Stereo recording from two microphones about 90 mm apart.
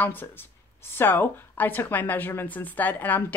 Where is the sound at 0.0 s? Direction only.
20° left (ahead or behind).